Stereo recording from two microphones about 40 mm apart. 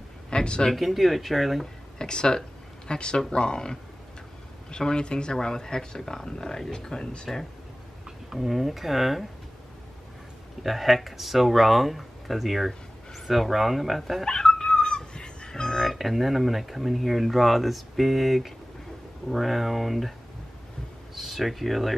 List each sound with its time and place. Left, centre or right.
0.3 s speech: left
0.7 s speech: centre
2.0 s speech: centre
8.3 s speech: centre
10.6 s speech: centre
14.2 s a sound: centre
19.2 s speech: centre